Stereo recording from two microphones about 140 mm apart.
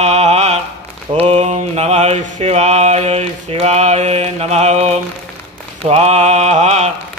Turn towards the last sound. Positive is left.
turn(degrees=-55)  # may be behind; listen again after turning